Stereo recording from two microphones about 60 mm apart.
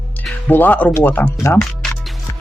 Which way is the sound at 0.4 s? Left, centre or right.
Left.